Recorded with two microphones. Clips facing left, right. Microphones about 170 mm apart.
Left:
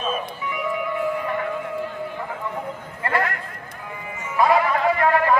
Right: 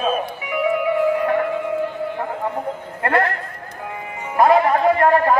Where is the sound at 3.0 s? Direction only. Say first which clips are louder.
Right 5 dB; 60° right (ahead or behind).